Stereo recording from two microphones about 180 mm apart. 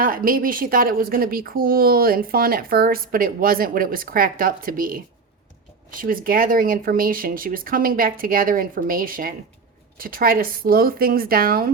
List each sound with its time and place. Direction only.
0.0 s a woman's voice: 55° right (ahead or behind)